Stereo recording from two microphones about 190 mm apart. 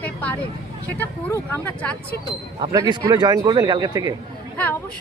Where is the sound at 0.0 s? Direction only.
10° left (ahead or behind).